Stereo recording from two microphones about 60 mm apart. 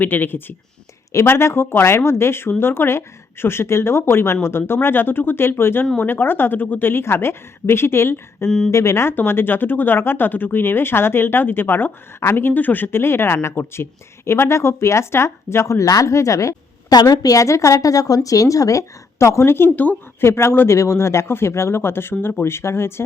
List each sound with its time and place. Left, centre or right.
0.0 s speech: left
8.4 s a woman's voice: centre
8.7 s speech: left
9.1 s speech: left
20.2 s speech: left
22.2 s speech: left
22.4 s speech: left